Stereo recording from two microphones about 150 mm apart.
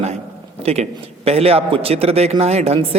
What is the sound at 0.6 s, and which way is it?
A man's voice, 45° right (ahead or behind).